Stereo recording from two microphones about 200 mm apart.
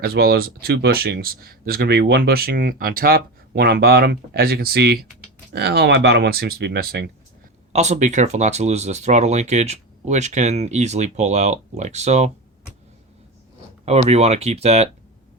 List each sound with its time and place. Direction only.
0.0 s speech: 50° right (ahead or behind)
7.7 s speech: 35° right (ahead or behind)
13.8 s speech: 30° right (ahead or behind)